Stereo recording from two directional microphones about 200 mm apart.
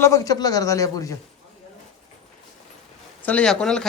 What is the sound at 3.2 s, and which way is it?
Speech, 5° left (ahead or behind).